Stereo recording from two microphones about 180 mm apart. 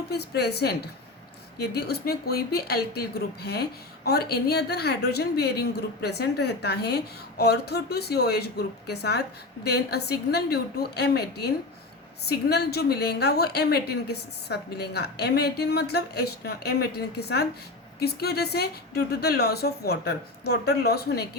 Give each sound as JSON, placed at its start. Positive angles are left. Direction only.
{"t": 0.1, "sound": "a woman's voice", "side_deg": 65}